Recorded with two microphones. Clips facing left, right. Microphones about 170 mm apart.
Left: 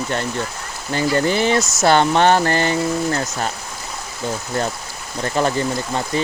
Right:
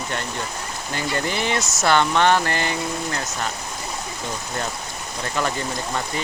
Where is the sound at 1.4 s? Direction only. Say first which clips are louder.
Left 5 dB; 35° left (ahead or behind).